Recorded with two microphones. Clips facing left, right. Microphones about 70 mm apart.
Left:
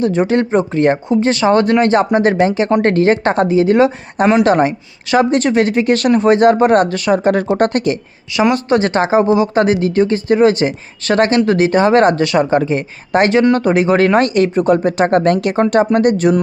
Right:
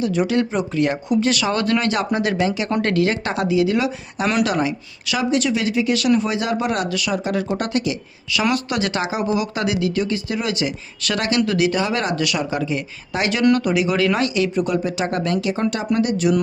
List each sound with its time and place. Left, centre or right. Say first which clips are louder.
0.0 s speech: left 5 dB; left
8.3 s speech: left 8 dB; left